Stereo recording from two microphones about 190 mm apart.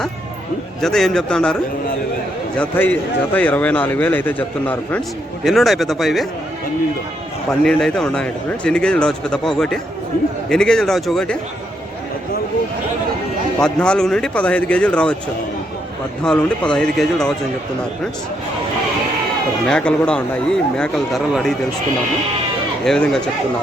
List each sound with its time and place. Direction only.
0.8 s speech: centre (ahead or behind)
2.6 s a man's voice: 10° left (ahead or behind)
7.6 s speech: 5° left (ahead or behind)
13.6 s speech: 5° left (ahead or behind)
16.2 s speech: 5° left (ahead or behind)
19.6 s speech: 5° left (ahead or behind)
22.8 s speech: 5° left (ahead or behind)